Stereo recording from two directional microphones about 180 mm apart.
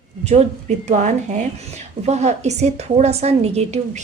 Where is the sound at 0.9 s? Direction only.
45° right (ahead or behind).